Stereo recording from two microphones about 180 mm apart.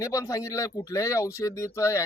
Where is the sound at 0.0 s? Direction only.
15° left (ahead or behind).